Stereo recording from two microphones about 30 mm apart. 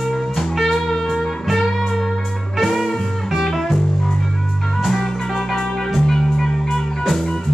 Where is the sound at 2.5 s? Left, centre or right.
Centre.